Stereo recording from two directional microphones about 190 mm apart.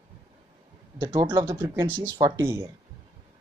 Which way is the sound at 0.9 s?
20° right (ahead or behind).